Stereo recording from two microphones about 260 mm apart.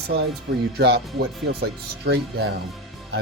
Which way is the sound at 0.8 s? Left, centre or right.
Right.